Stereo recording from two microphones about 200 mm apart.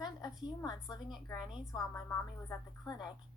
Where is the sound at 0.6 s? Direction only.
20° left (ahead or behind).